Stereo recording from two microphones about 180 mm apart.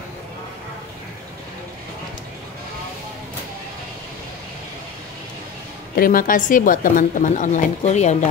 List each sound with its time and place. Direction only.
5.9 s a woman's voice: 50° left (ahead or behind)